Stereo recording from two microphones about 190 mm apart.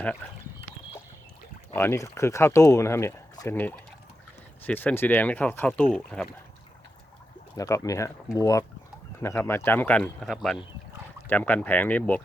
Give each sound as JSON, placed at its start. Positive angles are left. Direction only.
{"t": 1.7, "sound": "speech", "side_deg": 10}
{"t": 7.5, "sound": "speech", "side_deg": 15}